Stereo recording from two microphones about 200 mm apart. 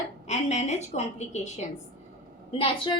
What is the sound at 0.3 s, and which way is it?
A woman's voice, 35° left (ahead or behind).